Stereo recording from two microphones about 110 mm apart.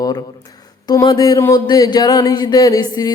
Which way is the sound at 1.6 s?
40° left (ahead or behind).